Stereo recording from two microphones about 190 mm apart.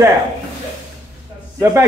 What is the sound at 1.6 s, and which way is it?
Speech, 15° right (ahead or behind).